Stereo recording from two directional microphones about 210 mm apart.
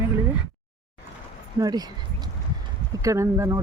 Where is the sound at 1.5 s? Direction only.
20° right (ahead or behind).